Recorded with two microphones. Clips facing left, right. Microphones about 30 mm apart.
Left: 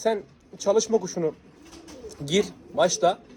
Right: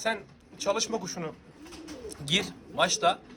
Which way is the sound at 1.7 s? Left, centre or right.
Right.